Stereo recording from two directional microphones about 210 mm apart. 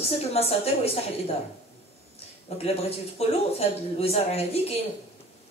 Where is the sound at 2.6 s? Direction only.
30° left (ahead or behind).